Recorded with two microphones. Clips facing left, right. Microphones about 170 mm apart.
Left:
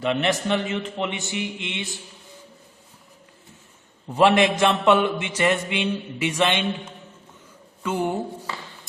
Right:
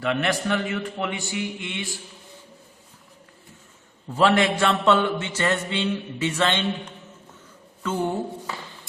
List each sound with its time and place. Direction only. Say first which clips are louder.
0.0 s a man's voice: left 1 dB; 20° left (ahead or behind)
4.1 s mantra: left 2 dB; 20° left (ahead or behind)
7.8 s speech: left 1 dB; 15° left (ahead or behind)